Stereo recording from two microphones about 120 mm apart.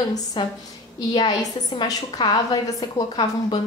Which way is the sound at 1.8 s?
30° left (ahead or behind).